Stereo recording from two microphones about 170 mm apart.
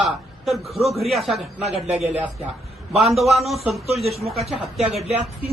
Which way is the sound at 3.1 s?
Centre (ahead or behind).